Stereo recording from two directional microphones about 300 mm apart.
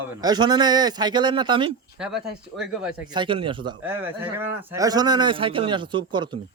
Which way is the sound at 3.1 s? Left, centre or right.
Centre.